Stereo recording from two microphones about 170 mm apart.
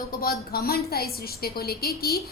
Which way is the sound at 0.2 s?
65° left (ahead or behind).